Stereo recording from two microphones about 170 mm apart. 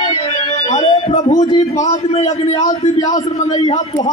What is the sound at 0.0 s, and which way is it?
Music, 30° left (ahead or behind).